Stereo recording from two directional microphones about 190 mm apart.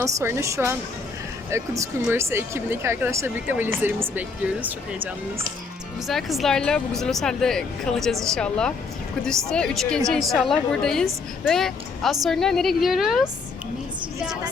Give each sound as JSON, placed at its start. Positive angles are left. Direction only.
{"t": 0.0, "sound": "speech", "side_deg": -15}
{"t": 6.1, "sound": "speech", "side_deg": 0}